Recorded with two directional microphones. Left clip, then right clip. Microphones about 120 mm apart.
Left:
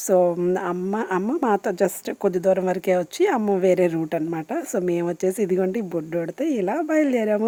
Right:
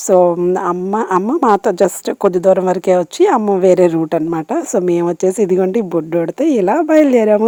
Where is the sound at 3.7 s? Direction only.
50° right (ahead or behind).